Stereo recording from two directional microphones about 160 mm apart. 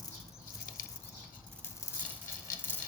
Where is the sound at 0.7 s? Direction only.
60° left (ahead or behind).